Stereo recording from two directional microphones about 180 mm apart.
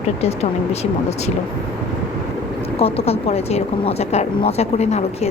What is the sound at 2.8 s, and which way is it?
A woman's voice, 35° left (ahead or behind).